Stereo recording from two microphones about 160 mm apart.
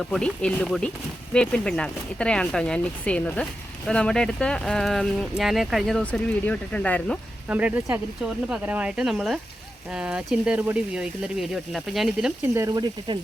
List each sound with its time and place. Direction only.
0.0 s speech: 5° left (ahead or behind)
7.4 s speech: 10° right (ahead or behind)
12.5 s frying: 20° right (ahead or behind)